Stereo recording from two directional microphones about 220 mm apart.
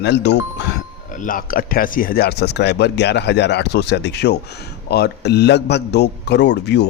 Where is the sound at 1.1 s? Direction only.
40° left (ahead or behind).